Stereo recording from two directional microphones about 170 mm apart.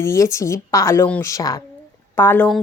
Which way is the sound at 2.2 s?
10° left (ahead or behind).